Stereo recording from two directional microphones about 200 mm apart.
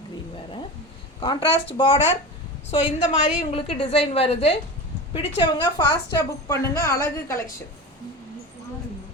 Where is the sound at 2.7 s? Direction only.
25° left (ahead or behind).